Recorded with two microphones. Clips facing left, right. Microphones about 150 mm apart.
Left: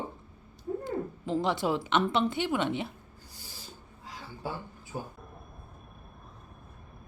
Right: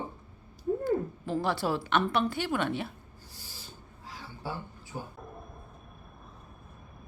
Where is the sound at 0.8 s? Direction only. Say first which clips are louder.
Right 4 dB; 20° left (ahead or behind).